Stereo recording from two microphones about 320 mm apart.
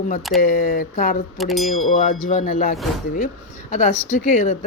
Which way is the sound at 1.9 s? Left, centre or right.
Left.